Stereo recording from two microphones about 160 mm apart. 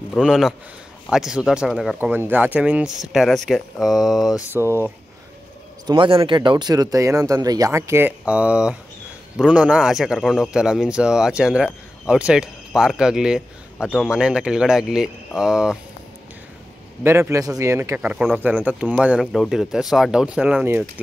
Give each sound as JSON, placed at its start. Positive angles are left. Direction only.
{"t": 0.1, "sound": "a man's voice", "side_deg": 0}
{"t": 4.5, "sound": "speech", "side_deg": -15}
{"t": 5.9, "sound": "a man's voice", "side_deg": -30}
{"t": 17.0, "sound": "a man's voice", "side_deg": -15}